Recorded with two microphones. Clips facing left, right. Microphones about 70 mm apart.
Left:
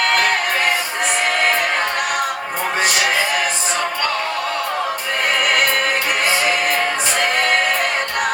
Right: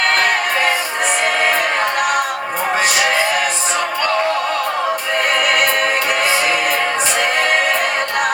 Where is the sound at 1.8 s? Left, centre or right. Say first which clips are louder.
Right 3 dB; centre.